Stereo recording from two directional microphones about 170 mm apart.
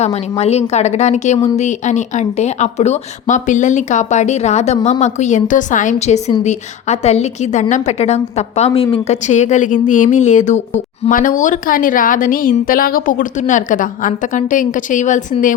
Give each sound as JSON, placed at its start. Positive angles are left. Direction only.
{"t": 0.0, "sound": "a woman's voice", "side_deg": 40}